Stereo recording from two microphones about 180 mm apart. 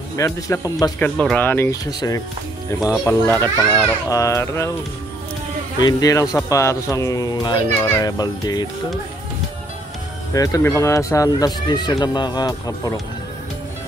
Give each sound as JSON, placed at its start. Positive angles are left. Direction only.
{"t": 0.1, "sound": "a child's voice", "side_deg": 15}
{"t": 0.9, "sound": "a child's voice", "side_deg": 5}
{"t": 5.8, "sound": "speech", "side_deg": 20}
{"t": 10.3, "sound": "speech", "side_deg": 20}